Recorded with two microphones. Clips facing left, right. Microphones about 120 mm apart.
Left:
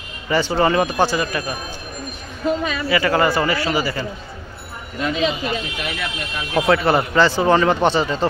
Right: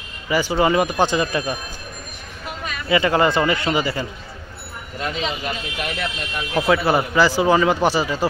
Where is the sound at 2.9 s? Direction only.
20° right (ahead or behind).